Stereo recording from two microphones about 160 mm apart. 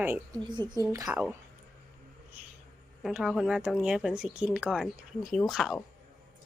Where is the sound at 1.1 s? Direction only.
10° right (ahead or behind).